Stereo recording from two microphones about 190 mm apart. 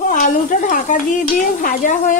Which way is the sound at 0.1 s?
45° left (ahead or behind).